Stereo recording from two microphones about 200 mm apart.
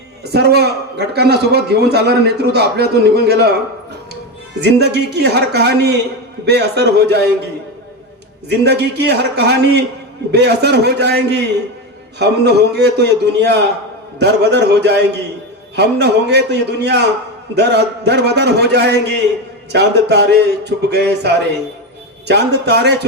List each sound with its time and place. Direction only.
0.3 s a man's voice: 55° right (ahead or behind)
4.6 s a man's voice: 55° right (ahead or behind)
8.4 s a man's voice: 55° right (ahead or behind)